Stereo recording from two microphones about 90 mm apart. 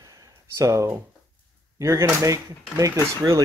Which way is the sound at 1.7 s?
35° right (ahead or behind).